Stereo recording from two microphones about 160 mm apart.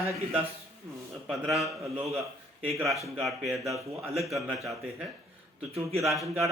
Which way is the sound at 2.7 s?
Centre (ahead or behind).